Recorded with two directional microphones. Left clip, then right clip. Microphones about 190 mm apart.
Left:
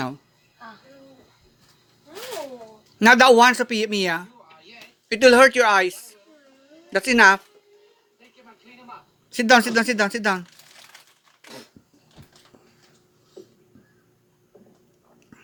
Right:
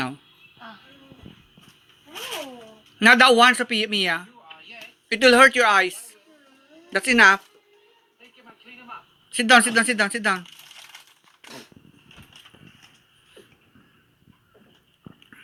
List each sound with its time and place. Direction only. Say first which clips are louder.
3.0 s speech: left 1 dB; 35° left (ahead or behind)
9.3 s speech: even; 30° left (ahead or behind)